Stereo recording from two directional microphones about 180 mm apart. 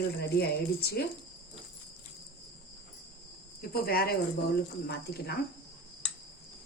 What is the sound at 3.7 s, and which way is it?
Speech, 55° left (ahead or behind).